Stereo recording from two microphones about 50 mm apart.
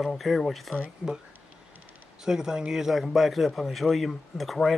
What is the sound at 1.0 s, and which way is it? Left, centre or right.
Speech, right.